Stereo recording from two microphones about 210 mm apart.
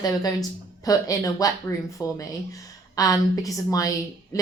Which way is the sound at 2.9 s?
15° left (ahead or behind).